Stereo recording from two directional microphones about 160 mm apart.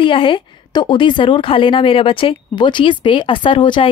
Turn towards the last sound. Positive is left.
turn(degrees=30)  # may be behind; listen again after turning